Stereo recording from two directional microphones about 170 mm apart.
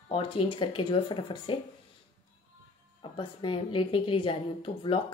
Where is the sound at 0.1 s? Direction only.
30° left (ahead or behind).